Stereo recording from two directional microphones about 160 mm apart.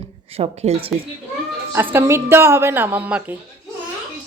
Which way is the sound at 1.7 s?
15° right (ahead or behind).